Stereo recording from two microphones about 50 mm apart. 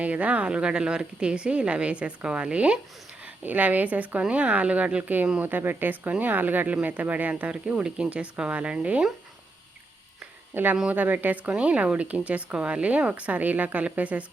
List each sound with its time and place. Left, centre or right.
0.0 s a woman's voice: right
3.2 s a woman's voice: right
5.4 s speech: right
7.5 s a woman's voice: centre
10.5 s speech: right
11.5 s a woman's voice: right